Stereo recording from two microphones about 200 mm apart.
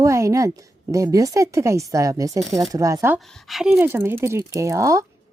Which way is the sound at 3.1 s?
Centre (ahead or behind).